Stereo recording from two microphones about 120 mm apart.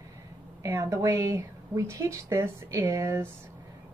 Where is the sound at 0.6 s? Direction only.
20° right (ahead or behind).